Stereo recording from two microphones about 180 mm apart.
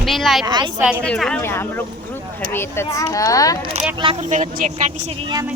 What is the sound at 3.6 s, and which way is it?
Speech, 35° right (ahead or behind).